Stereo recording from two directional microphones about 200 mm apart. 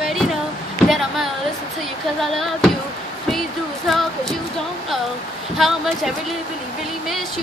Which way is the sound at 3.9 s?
Centre (ahead or behind).